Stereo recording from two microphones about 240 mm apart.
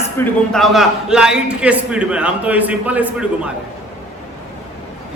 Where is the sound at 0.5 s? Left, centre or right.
Centre.